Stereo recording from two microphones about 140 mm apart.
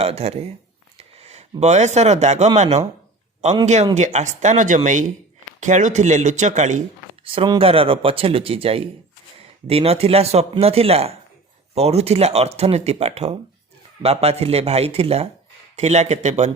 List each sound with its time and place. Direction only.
0.0 s speech: 45° right (ahead or behind)
7.3 s speech: 35° right (ahead or behind); by 16.5 s 55° right (ahead or behind)